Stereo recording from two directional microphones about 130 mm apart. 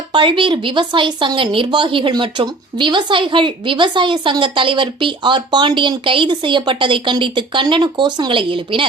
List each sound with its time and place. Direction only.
0.1 s speech: 40° right (ahead or behind)